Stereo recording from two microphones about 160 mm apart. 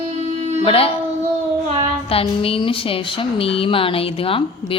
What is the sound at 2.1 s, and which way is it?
A woman's voice, 35° left (ahead or behind).